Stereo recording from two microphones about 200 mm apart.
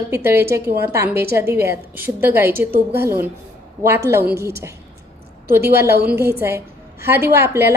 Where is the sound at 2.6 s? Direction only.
50° right (ahead or behind).